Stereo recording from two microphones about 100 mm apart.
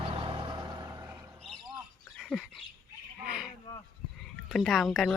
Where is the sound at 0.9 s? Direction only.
25° right (ahead or behind).